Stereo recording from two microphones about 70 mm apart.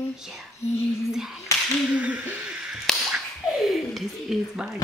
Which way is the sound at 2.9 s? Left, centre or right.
Centre.